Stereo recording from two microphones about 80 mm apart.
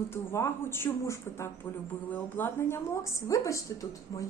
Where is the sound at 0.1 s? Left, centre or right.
Left.